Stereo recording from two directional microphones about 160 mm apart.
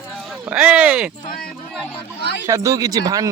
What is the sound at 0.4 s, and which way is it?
Speech, 5° right (ahead or behind).